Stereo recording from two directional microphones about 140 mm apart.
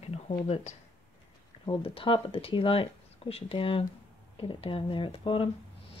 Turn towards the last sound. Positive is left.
turn(degrees=40)  # may be behind; listen again after turning